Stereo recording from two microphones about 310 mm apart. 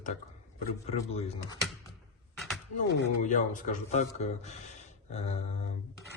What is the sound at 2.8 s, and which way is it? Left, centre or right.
Speech, left.